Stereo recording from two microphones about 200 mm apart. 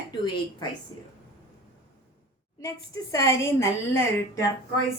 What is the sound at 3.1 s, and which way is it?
Speech, 15° left (ahead or behind).